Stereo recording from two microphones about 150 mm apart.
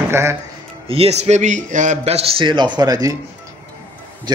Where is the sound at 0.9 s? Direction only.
45° right (ahead or behind); by 3.1 s 25° right (ahead or behind).